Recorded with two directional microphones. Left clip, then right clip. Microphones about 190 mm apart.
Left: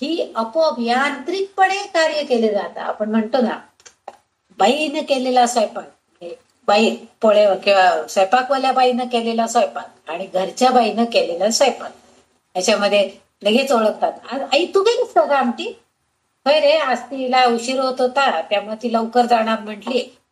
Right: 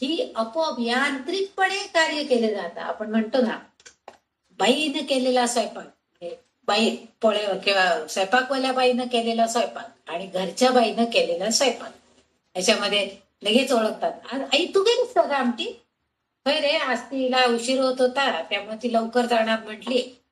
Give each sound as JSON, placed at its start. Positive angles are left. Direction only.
{"t": 0.0, "sound": "a woman's voice", "side_deg": 25}